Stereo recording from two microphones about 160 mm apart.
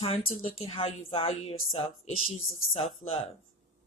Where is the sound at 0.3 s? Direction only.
35° left (ahead or behind).